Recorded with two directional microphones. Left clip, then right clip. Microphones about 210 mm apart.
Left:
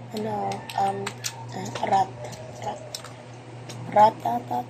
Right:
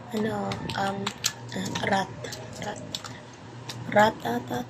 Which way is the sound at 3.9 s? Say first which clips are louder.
Left 4 dB; 50° right (ahead or behind).